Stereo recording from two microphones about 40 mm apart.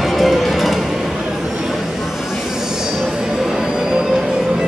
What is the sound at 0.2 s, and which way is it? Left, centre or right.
Music, centre.